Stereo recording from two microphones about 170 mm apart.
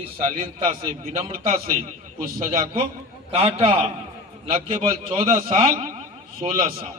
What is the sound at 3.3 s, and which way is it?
A man's voice, 35° right (ahead or behind).